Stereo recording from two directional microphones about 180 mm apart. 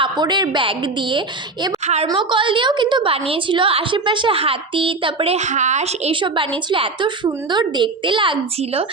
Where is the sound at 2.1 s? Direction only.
25° right (ahead or behind).